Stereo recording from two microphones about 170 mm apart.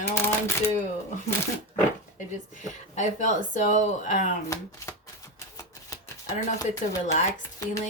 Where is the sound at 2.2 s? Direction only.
45° left (ahead or behind).